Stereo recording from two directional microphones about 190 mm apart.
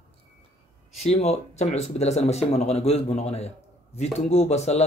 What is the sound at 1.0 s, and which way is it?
Speech, 35° left (ahead or behind).